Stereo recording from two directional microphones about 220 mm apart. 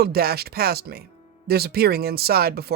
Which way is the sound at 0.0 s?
45° right (ahead or behind).